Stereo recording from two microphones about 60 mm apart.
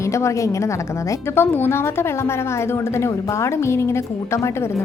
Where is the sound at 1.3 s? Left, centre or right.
Left.